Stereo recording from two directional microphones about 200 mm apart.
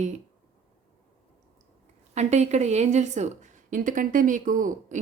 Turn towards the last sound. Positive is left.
turn(degrees=-40)  # may be behind; listen again after turning